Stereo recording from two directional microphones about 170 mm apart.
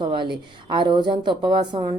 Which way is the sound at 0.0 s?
30° right (ahead or behind).